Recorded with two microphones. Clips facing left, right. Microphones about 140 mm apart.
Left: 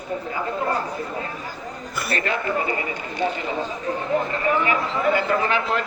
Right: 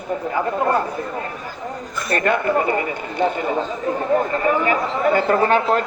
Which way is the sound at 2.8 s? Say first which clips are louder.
Right 5 dB; 50° right (ahead or behind).